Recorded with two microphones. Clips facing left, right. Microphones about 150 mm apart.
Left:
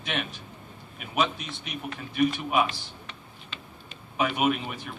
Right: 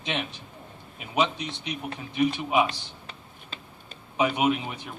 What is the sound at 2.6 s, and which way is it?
Computer keyboard, 35° right (ahead or behind).